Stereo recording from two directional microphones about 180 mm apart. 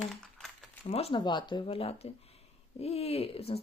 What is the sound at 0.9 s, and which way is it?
Speech, 30° left (ahead or behind).